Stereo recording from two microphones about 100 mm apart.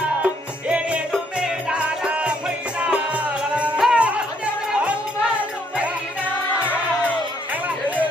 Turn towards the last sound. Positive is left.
turn(degrees=15)  # may be behind; listen again after turning